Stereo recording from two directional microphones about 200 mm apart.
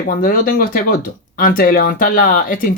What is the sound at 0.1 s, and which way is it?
Speech, 45° left (ahead or behind).